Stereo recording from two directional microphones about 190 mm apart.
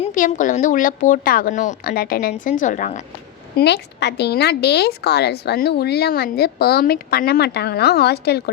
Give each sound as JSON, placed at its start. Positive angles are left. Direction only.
{"t": 0.1, "sound": "a woman's voice", "side_deg": 45}
{"t": 3.6, "sound": "a woman's voice", "side_deg": 60}